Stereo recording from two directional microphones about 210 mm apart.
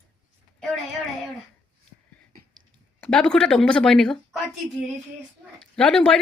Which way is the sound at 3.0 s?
5° left (ahead or behind).